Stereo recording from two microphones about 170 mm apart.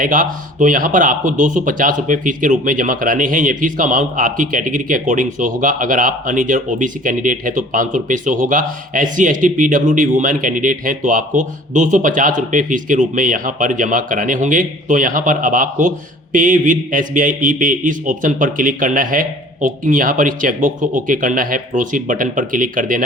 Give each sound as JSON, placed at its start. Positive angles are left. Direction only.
{"t": 0.0, "sound": "speech", "side_deg": -50}